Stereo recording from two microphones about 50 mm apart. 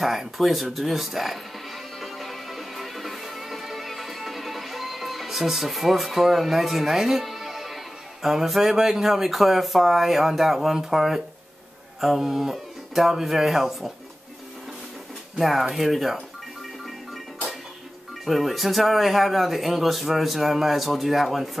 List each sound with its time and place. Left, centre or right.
0.0 s music: centre
12.0 s speech: centre
15.3 s speech: centre
18.2 s speech: centre